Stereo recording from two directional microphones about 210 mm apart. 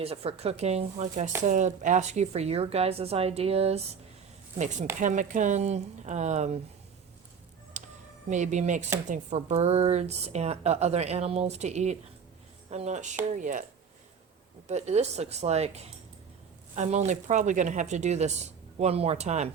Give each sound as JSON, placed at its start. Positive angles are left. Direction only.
{"t": 0.0, "sound": "a woman's voice", "side_deg": -30}
{"t": 7.8, "sound": "music", "side_deg": -35}
{"t": 8.3, "sound": "a woman's voice", "side_deg": -35}
{"t": 14.7, "sound": "a woman's voice", "side_deg": -30}